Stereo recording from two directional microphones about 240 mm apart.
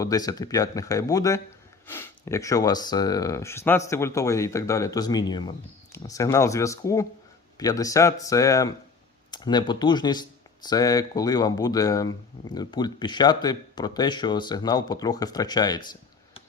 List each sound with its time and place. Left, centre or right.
0.0 s speech: centre